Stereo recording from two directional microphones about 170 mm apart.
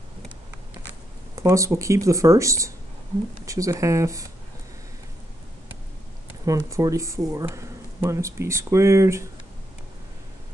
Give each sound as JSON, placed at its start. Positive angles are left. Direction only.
{"t": 1.3, "sound": "speech", "side_deg": -20}
{"t": 6.4, "sound": "speech", "side_deg": -20}